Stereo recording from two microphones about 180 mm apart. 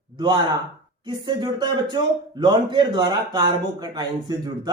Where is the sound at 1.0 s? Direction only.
25° right (ahead or behind).